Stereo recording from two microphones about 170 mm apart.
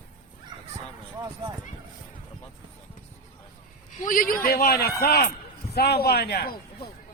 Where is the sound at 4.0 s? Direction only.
55° left (ahead or behind).